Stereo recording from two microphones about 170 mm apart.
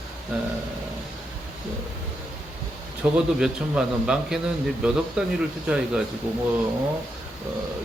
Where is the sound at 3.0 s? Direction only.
5° right (ahead or behind).